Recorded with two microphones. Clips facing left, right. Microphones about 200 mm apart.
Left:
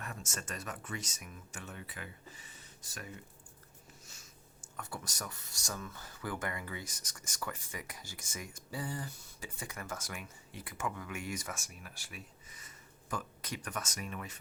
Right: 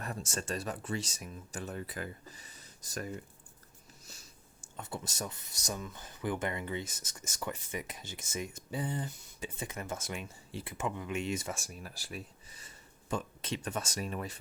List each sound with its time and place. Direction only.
0.0 s speech: 35° right (ahead or behind)
4.0 s a sound: 35° right (ahead or behind)
4.8 s speech: 25° right (ahead or behind)